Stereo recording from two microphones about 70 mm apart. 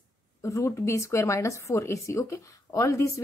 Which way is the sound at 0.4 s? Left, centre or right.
Left.